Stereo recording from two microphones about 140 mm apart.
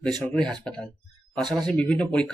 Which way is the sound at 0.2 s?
5° left (ahead or behind).